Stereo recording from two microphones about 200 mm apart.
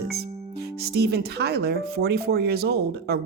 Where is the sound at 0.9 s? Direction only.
55° right (ahead or behind).